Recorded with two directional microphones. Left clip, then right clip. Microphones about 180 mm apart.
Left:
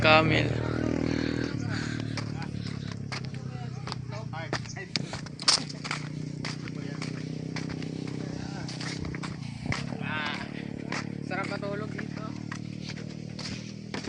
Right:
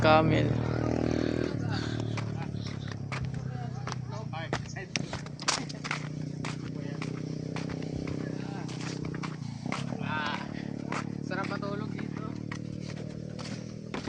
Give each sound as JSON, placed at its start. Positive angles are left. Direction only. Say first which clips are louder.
{"t": 0.0, "sound": "speech", "louder": "left 2 dB", "side_deg": -10}
{"t": 0.8, "sound": "vehicle", "louder": "even", "side_deg": 65}
{"t": 1.1, "sound": "a sound", "louder": "even", "side_deg": -15}
{"t": 5.5, "sound": "walk", "louder": "left 5 dB", "side_deg": 10}
{"t": 10.0, "sound": "roaring cats", "louder": "right 1 dB", "side_deg": -60}